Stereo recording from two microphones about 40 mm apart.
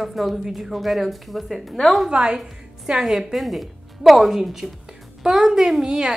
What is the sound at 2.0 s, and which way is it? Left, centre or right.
Speech, right.